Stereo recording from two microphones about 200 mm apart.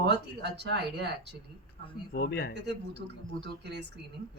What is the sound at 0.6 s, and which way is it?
Speech, 60° right (ahead or behind).